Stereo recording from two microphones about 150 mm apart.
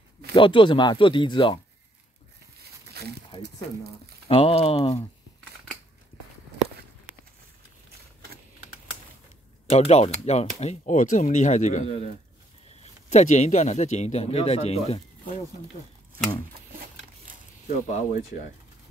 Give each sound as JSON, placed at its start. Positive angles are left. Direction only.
{"t": 0.3, "sound": "speech", "side_deg": 35}
{"t": 2.9, "sound": "a sound", "side_deg": -90}
{"t": 3.3, "sound": "speech", "side_deg": 30}
{"t": 9.7, "sound": "speech", "side_deg": 45}
{"t": 17.6, "sound": "speech", "side_deg": 55}